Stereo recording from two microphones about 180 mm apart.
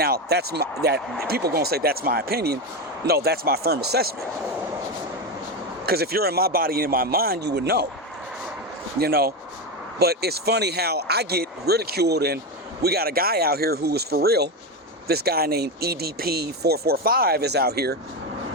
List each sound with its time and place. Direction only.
0.0 s speech: 60° right (ahead or behind)
5.8 s speech: 60° right (ahead or behind)
9.0 s speech: 60° right (ahead or behind)